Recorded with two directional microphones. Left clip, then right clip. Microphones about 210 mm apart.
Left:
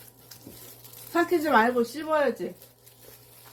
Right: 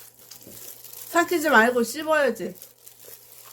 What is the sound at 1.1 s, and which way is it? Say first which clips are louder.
A woman's voice: right 3 dB; 50° right (ahead or behind).